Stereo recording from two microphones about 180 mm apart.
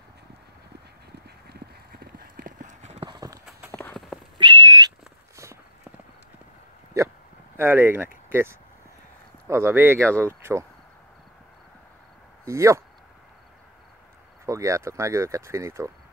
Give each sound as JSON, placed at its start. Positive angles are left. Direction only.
{"t": 1.5, "sound": "clip-clop", "side_deg": -60}
{"t": 3.1, "sound": "clip-clop", "side_deg": -20}
{"t": 3.7, "sound": "clip-clop", "side_deg": 5}
{"t": 4.4, "sound": "whistling", "side_deg": -25}
{"t": 7.5, "sound": "speech", "side_deg": -10}
{"t": 12.4, "sound": "speech", "side_deg": -15}
{"t": 14.4, "sound": "speech", "side_deg": -15}